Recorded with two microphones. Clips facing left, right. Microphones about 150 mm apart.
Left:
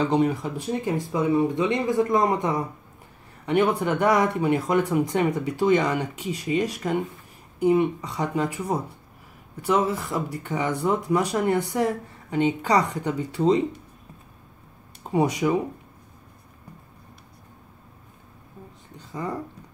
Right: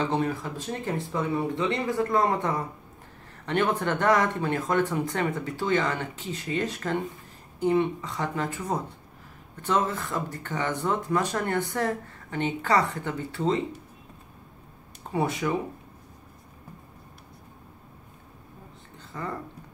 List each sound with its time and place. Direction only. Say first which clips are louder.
0.0 s speech: left 5 dB; 15° left (ahead or behind)
15.0 s speech: left 5 dB; 15° left (ahead or behind)
19.1 s speech: left 4 dB; 15° left (ahead or behind)